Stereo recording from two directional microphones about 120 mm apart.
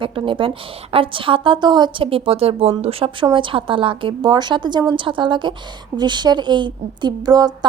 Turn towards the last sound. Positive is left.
turn(degrees=-35)  # may be behind; listen again after turning